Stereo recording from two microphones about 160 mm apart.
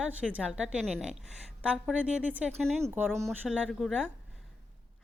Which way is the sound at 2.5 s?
5° left (ahead or behind).